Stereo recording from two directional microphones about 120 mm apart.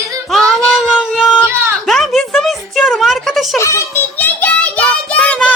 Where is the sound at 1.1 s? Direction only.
Centre (ahead or behind).